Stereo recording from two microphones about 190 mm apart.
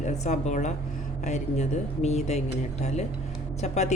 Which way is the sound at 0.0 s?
35° left (ahead or behind).